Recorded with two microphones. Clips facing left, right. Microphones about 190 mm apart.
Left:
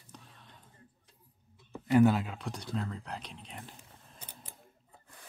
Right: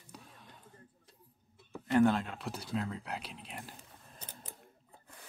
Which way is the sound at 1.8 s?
5° left (ahead or behind).